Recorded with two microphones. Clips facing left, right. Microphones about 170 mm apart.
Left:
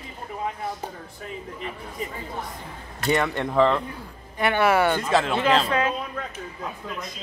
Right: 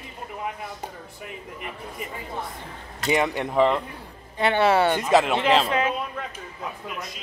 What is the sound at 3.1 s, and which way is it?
Speech, 15° right (ahead or behind).